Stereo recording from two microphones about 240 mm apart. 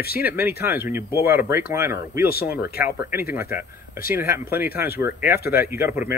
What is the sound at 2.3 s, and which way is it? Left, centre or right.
Speech, left.